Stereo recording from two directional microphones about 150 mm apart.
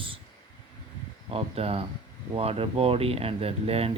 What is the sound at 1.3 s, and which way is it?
Speech, 40° right (ahead or behind).